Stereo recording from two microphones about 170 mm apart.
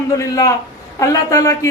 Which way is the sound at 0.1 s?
20° left (ahead or behind).